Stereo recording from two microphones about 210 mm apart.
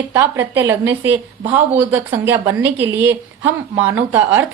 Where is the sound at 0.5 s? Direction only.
10° right (ahead or behind).